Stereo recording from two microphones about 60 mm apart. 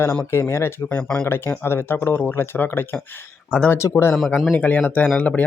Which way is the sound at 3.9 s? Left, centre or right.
Left.